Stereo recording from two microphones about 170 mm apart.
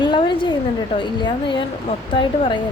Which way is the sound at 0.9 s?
30° left (ahead or behind).